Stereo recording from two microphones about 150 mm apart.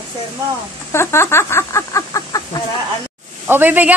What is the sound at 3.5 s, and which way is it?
Speech, 10° right (ahead or behind).